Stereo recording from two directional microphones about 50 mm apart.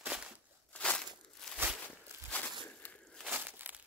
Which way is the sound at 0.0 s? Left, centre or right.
Right.